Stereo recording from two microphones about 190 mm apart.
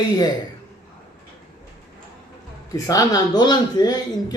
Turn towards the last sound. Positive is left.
turn(degrees=20)  # may be behind; listen again after turning